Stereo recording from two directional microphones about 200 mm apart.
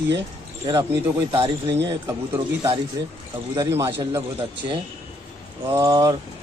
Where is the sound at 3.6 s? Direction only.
15° right (ahead or behind).